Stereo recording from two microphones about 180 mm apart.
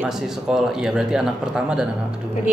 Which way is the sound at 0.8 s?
5° right (ahead or behind).